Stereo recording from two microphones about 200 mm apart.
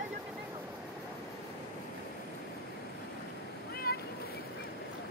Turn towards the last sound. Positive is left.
turn(degrees=50)  # may be behind; listen again after turning